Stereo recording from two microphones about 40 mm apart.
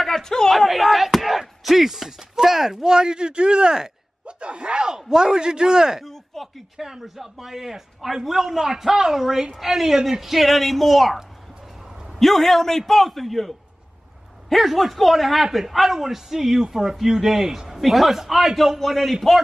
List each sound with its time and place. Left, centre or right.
0.0 s a man's voice: centre
0.5 s speech: centre
6.0 s speech: centre
6.8 s speech: centre
12.2 s speech: centre
14.5 s speech: centre